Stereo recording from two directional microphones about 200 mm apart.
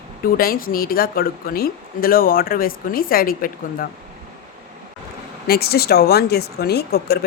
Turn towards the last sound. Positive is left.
turn(degrees=55)  # may be behind; listen again after turning